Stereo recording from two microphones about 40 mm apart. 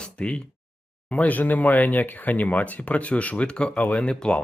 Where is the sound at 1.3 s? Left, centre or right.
Left.